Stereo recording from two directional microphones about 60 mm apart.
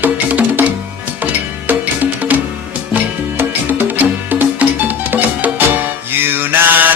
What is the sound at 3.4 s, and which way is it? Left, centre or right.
Music, right.